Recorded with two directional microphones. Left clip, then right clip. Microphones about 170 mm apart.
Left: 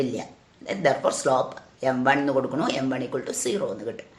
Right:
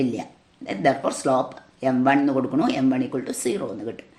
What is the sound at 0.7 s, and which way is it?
A woman's voice, 40° right (ahead or behind).